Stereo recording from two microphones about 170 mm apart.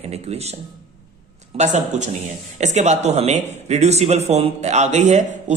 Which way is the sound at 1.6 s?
40° right (ahead or behind).